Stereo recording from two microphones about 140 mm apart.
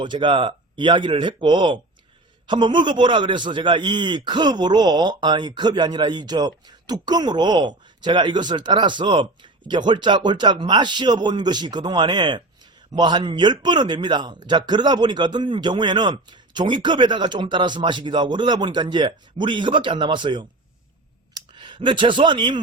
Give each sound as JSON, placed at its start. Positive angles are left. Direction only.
{"t": 0.0, "sound": "a man's voice", "side_deg": -35}